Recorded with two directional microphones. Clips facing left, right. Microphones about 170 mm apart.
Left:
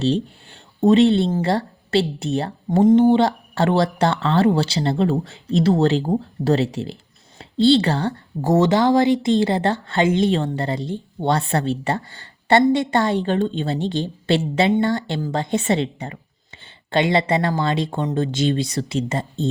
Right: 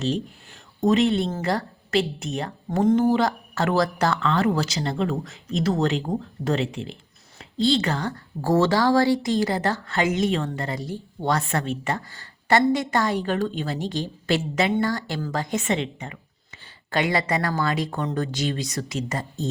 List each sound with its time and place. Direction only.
0.0 s speech: 30° left (ahead or behind)